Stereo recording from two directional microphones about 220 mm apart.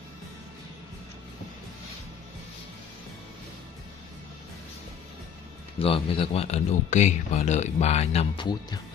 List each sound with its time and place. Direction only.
5.8 s speech: 25° left (ahead or behind)